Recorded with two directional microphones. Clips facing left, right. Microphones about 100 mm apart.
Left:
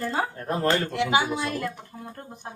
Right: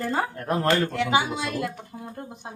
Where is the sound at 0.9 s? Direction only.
35° right (ahead or behind).